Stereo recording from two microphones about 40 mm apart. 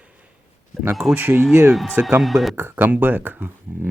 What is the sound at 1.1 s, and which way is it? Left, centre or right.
Speech, right.